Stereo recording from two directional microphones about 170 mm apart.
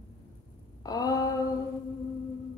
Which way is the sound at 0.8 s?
20° left (ahead or behind).